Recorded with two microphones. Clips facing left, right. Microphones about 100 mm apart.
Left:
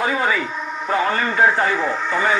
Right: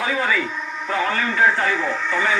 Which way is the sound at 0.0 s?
15° left (ahead or behind).